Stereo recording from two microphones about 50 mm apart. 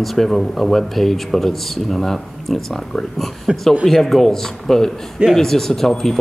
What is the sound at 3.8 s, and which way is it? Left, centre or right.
Speech, centre.